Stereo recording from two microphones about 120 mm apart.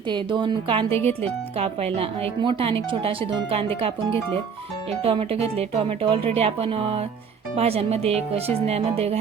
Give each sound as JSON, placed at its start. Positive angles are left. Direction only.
{"t": 0.1, "sound": "a woman's voice", "side_deg": -40}
{"t": 0.9, "sound": "speech", "side_deg": 15}
{"t": 1.5, "sound": "speech", "side_deg": -55}